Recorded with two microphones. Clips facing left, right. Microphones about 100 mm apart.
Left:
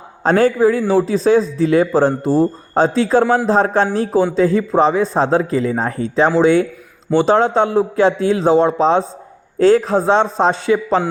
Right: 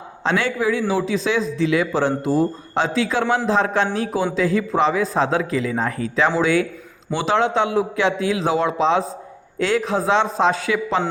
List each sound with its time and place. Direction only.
0.2 s a man's voice: 40° left (ahead or behind)